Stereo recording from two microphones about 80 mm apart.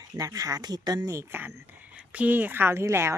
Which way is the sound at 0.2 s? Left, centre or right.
Right.